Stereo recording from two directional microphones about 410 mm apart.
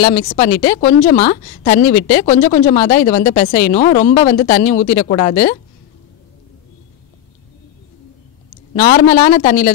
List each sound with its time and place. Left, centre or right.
0.0 s a woman's voice: left
8.7 s a woman's voice: centre